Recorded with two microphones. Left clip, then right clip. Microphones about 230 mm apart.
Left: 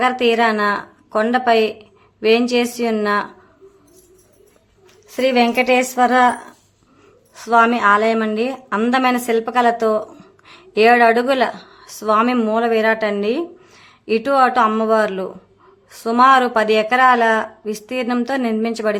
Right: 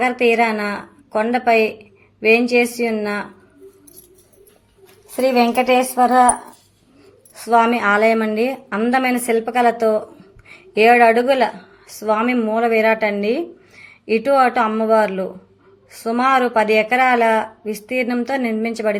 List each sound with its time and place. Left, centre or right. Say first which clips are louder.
0.0 s a woman's voice: even; centre
5.1 s a woman's voice: even; centre
5.5 s speech: even; left
6.0 s a woman's voice: right 1 dB; centre